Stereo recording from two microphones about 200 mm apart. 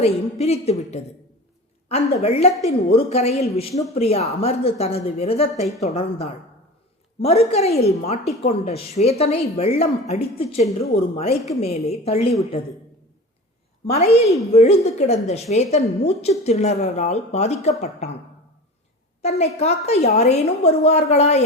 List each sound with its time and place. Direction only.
0.0 s a woman's voice: 30° left (ahead or behind)
13.9 s a woman's voice: 30° left (ahead or behind)
19.2 s a woman's voice: 30° left (ahead or behind)